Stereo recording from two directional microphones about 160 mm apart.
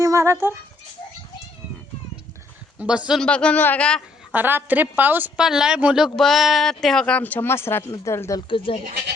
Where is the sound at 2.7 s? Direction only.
5° right (ahead or behind).